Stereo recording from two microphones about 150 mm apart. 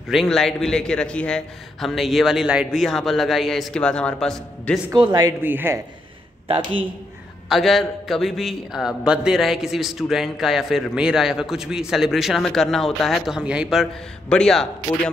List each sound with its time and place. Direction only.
0.1 s a man's voice: centre (ahead or behind)
4.9 s speech: 25° right (ahead or behind)
5.4 s a man's voice: 15° right (ahead or behind)
6.4 s a man's voice: 35° right (ahead or behind)
7.4 s a man's voice: centre (ahead or behind)